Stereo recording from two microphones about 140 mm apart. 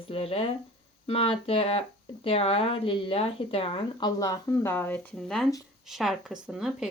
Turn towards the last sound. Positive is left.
turn(degrees=-5)  # may be behind; listen again after turning